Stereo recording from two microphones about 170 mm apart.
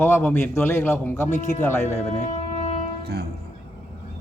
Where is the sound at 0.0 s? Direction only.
10° left (ahead or behind).